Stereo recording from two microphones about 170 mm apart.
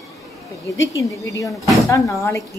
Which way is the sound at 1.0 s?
20° left (ahead or behind).